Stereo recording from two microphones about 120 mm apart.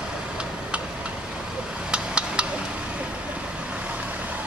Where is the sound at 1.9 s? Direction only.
10° right (ahead or behind).